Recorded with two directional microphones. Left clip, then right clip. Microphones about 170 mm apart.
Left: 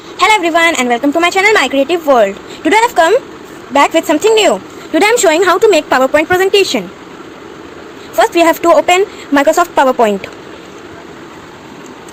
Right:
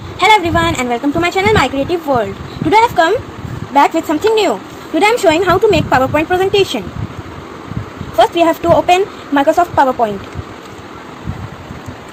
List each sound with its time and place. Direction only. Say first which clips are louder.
0.2 s a woman's voice: left 1 dB; 35° left (ahead or behind)
8.2 s a woman's voice: left 2 dB; 40° left (ahead or behind)